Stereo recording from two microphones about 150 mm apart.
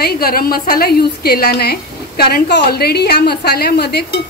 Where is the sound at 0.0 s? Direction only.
85° left.